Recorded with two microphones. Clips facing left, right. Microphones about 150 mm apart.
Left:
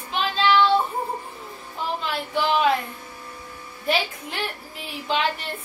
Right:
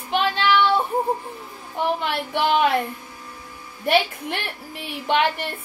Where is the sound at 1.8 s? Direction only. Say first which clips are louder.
Right 4 dB; 65° right (ahead or behind).